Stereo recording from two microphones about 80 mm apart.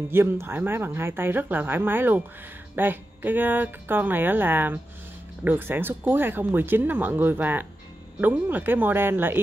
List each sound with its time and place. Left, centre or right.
0.1 s speech: right